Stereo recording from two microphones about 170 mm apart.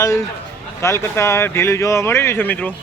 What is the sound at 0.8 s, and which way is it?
Speech, 15° left (ahead or behind).